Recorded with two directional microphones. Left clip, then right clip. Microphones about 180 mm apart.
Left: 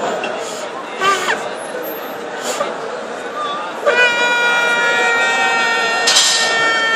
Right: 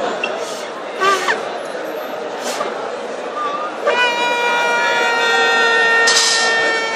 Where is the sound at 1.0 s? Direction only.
Centre (ahead or behind).